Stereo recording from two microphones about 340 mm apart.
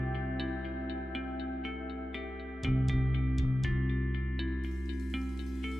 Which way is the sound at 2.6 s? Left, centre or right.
Centre.